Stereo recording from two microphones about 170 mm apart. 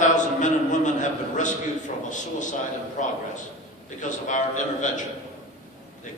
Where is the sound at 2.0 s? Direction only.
45° left (ahead or behind).